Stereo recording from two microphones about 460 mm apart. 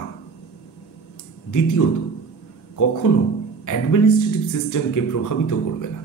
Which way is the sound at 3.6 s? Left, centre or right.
Left.